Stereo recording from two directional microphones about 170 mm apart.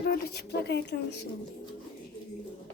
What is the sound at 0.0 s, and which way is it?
Speech, 70° left (ahead or behind).